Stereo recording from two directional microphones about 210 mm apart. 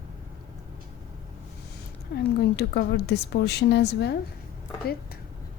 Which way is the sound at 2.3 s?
50° left (ahead or behind).